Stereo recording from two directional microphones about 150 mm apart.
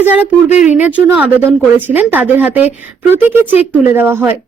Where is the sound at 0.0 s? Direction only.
10° right (ahead or behind).